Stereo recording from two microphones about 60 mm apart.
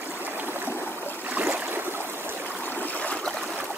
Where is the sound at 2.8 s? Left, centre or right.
Left.